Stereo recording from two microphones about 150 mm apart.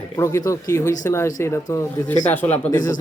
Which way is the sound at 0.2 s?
20° left (ahead or behind).